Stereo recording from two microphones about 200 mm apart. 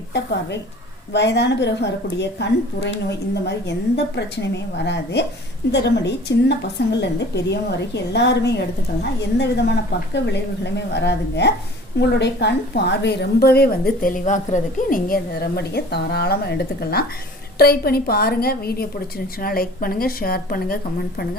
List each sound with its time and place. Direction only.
0.1 s a woman's voice: 60° left (ahead or behind)